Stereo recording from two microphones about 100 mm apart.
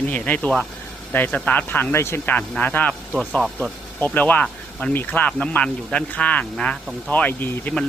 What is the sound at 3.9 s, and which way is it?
Speech, 15° left (ahead or behind).